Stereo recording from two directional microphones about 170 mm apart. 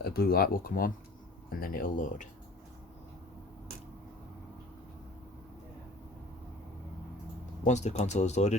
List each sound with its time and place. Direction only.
0.0 s speech: 65° left (ahead or behind)
7.6 s speech: 45° left (ahead or behind)